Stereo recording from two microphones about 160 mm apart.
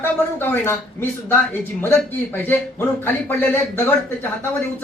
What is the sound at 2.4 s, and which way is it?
Speech, 10° left (ahead or behind).